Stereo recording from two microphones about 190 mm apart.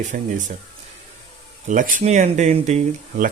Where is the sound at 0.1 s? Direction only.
40° right (ahead or behind).